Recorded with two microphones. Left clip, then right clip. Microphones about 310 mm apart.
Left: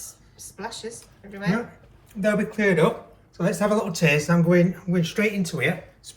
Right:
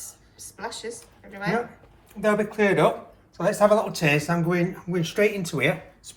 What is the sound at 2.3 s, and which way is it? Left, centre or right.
Speech, right.